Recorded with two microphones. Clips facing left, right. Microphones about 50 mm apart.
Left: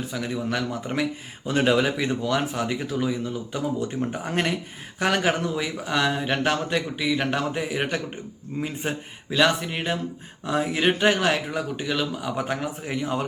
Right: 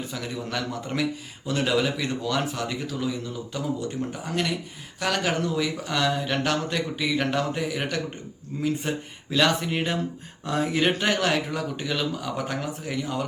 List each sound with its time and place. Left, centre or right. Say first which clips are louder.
0.1 s speech: left 4 dB; centre
4.1 s speech: left 2 dB; left
9.3 s speech: left 1 dB; centre; by 13.2 s left